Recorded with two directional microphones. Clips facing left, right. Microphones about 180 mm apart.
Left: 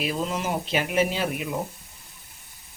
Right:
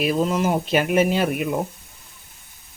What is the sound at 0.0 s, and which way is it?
Speech, 55° right (ahead or behind).